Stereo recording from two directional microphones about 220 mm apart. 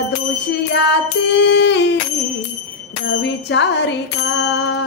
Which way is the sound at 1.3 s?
55° left (ahead or behind).